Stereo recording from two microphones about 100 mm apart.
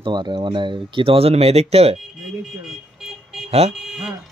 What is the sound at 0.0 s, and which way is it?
Speech, 50° right (ahead or behind).